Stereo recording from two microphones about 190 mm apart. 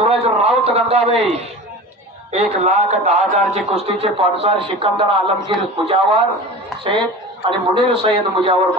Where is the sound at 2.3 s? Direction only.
35° right (ahead or behind).